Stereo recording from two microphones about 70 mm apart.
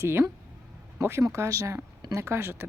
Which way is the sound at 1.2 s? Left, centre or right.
Right.